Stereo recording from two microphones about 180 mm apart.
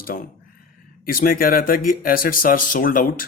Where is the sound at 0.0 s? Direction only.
55° left (ahead or behind).